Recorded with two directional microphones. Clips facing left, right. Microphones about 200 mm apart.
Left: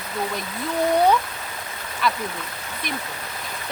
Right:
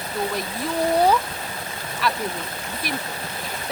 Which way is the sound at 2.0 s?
Centre (ahead or behind).